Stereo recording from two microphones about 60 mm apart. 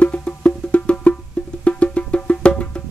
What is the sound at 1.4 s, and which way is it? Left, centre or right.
Music, centre.